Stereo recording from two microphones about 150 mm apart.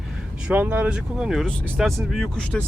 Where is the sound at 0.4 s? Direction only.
10° right (ahead or behind).